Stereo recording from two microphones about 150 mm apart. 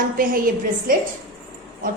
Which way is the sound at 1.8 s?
65° right (ahead or behind).